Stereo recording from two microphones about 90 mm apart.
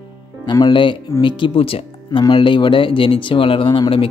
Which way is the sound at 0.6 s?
65° left (ahead or behind).